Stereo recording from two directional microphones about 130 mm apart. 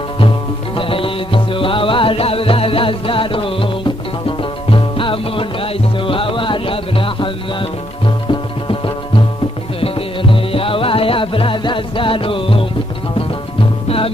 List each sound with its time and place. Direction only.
0.7 s music: 45° left (ahead or behind)